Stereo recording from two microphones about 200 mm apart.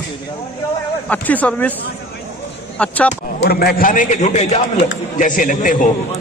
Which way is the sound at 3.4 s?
55° left (ahead or behind).